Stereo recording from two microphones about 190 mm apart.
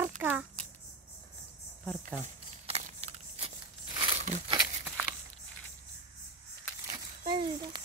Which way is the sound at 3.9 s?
25° right (ahead or behind).